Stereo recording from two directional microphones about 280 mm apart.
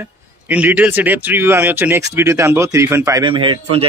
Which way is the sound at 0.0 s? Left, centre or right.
Centre.